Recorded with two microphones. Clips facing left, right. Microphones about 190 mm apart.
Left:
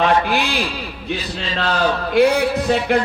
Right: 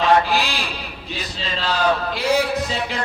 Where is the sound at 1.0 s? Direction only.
60° left (ahead or behind).